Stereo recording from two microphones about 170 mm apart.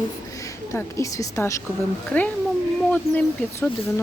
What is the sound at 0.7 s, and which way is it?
Speech, 15° left (ahead or behind).